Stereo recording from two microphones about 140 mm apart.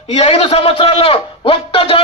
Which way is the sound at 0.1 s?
50° left (ahead or behind).